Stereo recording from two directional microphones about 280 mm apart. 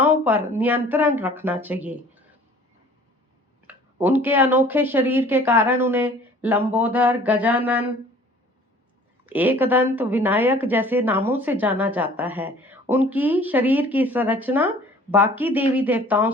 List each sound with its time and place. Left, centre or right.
0.0 s a woman's voice: centre
3.7 s a woman's voice: centre
7.3 s mantra: centre
9.2 s a woman's voice: centre